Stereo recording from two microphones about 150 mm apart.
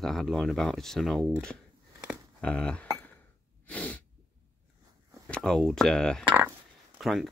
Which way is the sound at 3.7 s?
10° left (ahead or behind).